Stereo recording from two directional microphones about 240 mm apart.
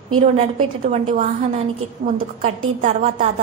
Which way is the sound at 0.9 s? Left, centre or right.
Right.